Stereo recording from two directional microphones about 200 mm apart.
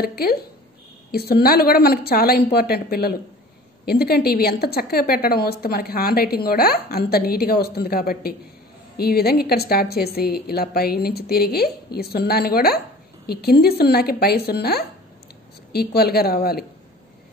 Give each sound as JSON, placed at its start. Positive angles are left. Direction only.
{"t": 0.0, "sound": "a woman's voice", "side_deg": 50}